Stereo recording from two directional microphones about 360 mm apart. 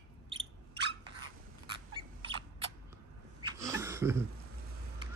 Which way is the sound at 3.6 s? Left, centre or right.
Centre.